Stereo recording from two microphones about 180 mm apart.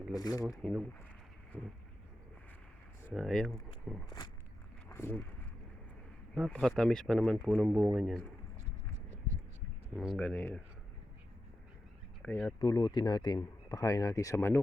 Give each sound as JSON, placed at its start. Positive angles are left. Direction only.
{"t": 0.1, "sound": "speech", "side_deg": 20}
{"t": 0.6, "sound": "speech", "side_deg": 5}
{"t": 3.1, "sound": "speech", "side_deg": 0}
{"t": 4.9, "sound": "a sound", "side_deg": 15}
{"t": 6.3, "sound": "speech", "side_deg": 0}
{"t": 9.9, "sound": "speech", "side_deg": 0}
{"t": 12.2, "sound": "speech", "side_deg": 10}
{"t": 12.5, "sound": "speech", "side_deg": 25}